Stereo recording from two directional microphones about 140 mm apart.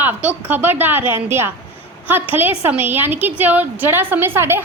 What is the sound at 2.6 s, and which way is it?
A woman's voice, 15° right (ahead or behind).